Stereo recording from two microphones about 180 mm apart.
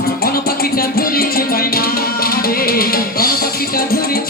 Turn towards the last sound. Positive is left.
turn(degrees=55)  # may be behind; listen again after turning